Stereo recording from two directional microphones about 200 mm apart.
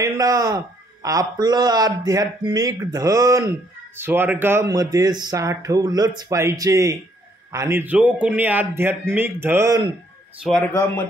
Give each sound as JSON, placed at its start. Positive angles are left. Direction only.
{"t": 0.0, "sound": "speech", "side_deg": -20}